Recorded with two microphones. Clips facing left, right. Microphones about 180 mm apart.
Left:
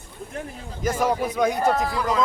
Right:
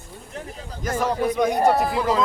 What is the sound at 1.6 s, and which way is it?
Speech, 30° right (ahead or behind).